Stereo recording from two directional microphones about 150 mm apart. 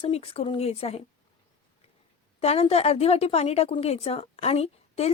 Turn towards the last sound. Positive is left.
turn(degrees=45)  # may be behind; listen again after turning